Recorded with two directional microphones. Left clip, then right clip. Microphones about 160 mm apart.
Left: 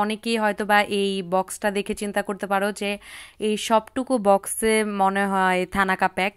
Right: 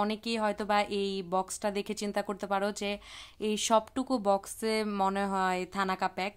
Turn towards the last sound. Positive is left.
turn(degrees=25)  # may be behind; listen again after turning